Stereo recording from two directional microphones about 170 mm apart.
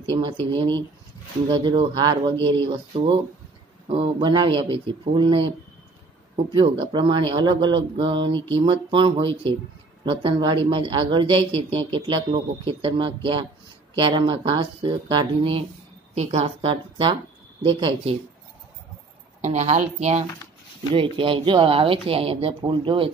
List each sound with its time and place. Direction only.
0.1 s speech: 30° right (ahead or behind)
19.4 s speech: 40° right (ahead or behind)
20.9 s speech: 30° right (ahead or behind)